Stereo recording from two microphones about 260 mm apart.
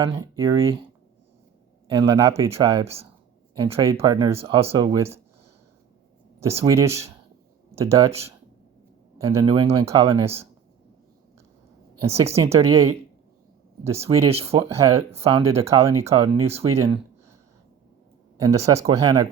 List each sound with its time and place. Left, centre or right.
0.0 s speech: centre
1.9 s speech: centre
6.7 s speech: centre
9.1 s speech: centre
12.3 s speech: centre
13.9 s speech: right
14.7 s speech: centre
15.1 s speech: right
15.6 s speech: centre
16.7 s speech: centre
18.3 s speech: centre